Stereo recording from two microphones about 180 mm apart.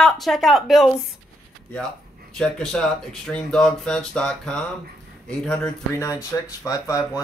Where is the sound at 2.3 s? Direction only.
5° left (ahead or behind).